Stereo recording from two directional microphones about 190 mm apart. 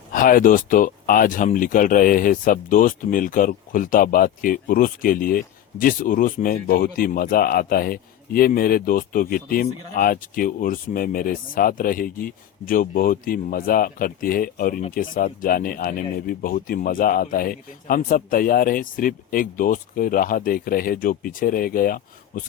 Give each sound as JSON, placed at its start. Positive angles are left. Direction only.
{"t": 0.1, "sound": "speech", "side_deg": 45}